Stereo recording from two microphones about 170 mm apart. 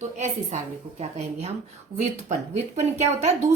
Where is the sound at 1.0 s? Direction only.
40° right (ahead or behind).